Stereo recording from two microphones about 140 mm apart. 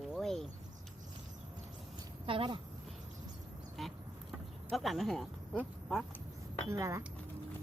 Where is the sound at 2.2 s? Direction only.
40° right (ahead or behind).